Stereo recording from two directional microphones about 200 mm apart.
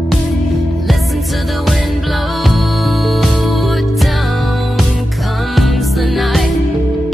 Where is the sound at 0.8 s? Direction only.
Centre (ahead or behind).